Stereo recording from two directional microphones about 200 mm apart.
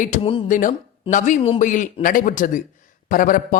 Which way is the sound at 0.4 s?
40° left (ahead or behind).